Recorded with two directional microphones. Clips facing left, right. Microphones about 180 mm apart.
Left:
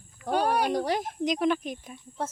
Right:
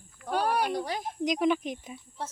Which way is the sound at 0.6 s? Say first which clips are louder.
Left 4 dB; 45° left (ahead or behind).